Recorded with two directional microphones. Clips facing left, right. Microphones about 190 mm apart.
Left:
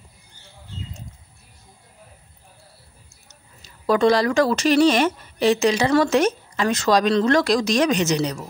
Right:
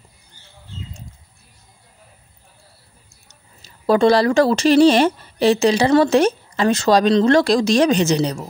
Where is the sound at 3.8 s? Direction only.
30° right (ahead or behind).